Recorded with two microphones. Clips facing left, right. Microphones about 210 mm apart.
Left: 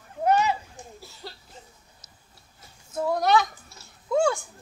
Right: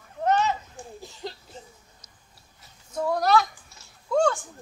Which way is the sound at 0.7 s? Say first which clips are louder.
Right 3 dB; 15° right (ahead or behind).